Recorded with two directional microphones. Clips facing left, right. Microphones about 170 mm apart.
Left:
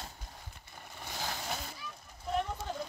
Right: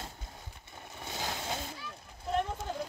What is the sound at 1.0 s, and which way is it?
Vehicle, 20° right (ahead or behind).